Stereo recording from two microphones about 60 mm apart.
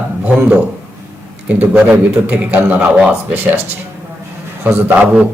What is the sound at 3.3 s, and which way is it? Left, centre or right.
Speech, right.